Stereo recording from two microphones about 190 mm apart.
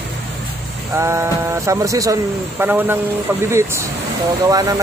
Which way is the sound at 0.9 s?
15° right (ahead or behind).